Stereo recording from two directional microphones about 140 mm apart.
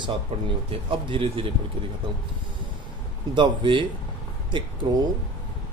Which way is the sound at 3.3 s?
35° right (ahead or behind).